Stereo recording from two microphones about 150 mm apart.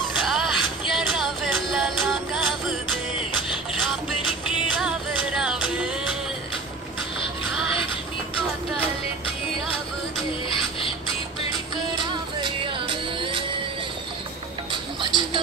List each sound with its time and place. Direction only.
0.2 s music: centre (ahead or behind)
4.7 s music: 5° right (ahead or behind)
11.9 s music: 30° right (ahead or behind)
14.7 s music: 30° right (ahead or behind)